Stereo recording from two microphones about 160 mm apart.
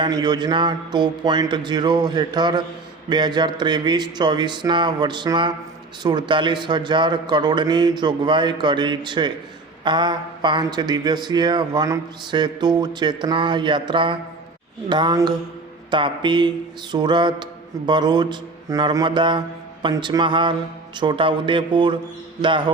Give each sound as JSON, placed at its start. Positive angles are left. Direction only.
{"t": 0.0, "sound": "speech", "side_deg": -25}